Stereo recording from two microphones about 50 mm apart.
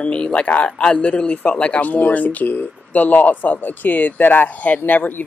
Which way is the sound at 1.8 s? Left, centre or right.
Left.